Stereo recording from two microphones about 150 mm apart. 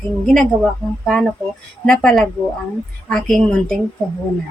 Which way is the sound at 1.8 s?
5° left (ahead or behind).